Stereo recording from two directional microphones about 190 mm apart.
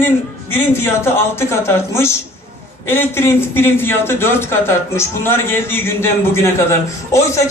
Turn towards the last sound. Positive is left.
turn(degrees=15)  # may be behind; listen again after turning